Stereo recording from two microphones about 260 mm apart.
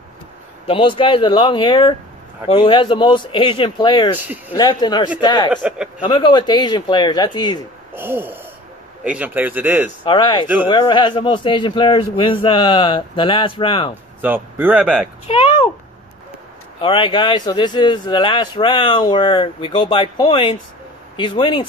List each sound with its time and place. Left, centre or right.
0.7 s a man's voice: centre
4.2 s speech: centre
4.6 s speech: centre
5.5 s speech: centre
5.9 s speech: centre
7.9 s speech: centre
10.0 s a man's voice: centre
14.2 s speech: centre
15.2 s a sound: left
16.8 s a man's voice: centre